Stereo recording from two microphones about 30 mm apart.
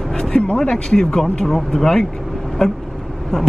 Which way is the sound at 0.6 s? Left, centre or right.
Left.